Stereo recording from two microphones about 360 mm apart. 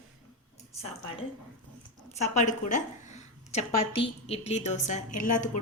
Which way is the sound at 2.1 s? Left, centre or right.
Centre.